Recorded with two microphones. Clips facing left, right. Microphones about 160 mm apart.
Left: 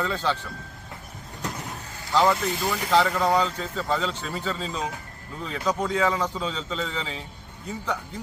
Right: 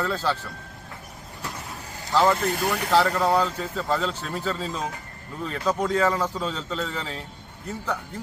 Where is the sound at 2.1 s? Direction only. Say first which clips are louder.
Right 1 dB; centre (ahead or behind).